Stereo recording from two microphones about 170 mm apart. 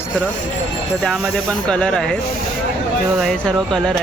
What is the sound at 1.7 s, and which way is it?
Speech, 5° left (ahead or behind).